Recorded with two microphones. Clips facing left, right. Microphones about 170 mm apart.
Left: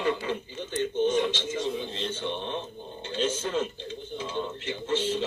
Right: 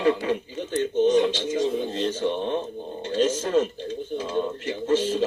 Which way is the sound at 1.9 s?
50° right (ahead or behind).